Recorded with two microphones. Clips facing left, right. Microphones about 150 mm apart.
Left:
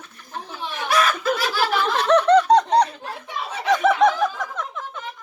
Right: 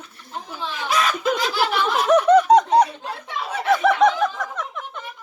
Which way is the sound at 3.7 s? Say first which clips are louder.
Even; centre (ahead or behind).